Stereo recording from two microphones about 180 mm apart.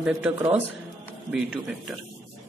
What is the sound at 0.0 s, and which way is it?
Speech, 5° right (ahead or behind).